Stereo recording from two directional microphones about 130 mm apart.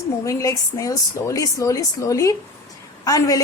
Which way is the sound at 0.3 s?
25° left (ahead or behind).